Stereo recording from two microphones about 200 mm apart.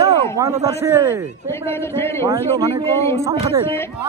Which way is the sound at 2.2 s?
15° right (ahead or behind).